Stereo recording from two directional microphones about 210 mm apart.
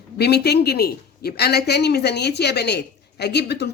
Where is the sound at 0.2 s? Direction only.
50° left (ahead or behind).